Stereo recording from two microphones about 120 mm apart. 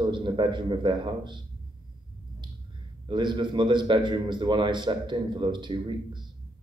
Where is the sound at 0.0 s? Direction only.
40° right (ahead or behind).